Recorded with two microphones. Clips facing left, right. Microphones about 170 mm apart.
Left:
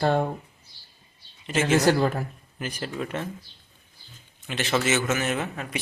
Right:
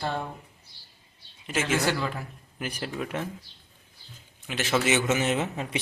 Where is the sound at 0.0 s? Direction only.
55° left (ahead or behind).